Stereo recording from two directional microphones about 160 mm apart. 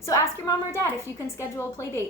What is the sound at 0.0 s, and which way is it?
A woman's voice, 20° left (ahead or behind).